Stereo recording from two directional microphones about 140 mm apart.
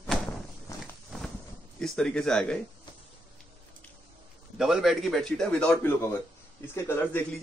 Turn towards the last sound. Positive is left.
turn(degrees=20)  # may be behind; listen again after turning